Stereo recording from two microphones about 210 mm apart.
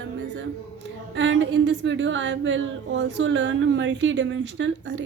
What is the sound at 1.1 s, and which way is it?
Speech, 60° right (ahead or behind).